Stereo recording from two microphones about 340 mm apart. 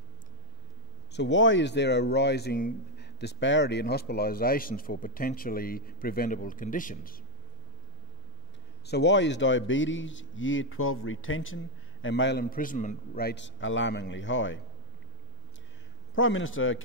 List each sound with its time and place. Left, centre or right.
1.1 s speech: left
8.8 s a man's voice: left
16.2 s a man's voice: left